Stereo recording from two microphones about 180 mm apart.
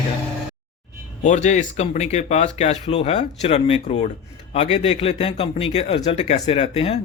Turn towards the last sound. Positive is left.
turn(degrees=35)  # may be behind; listen again after turning